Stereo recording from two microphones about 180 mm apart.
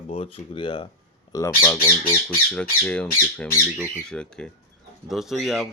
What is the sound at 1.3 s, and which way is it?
Speech, 15° left (ahead or behind).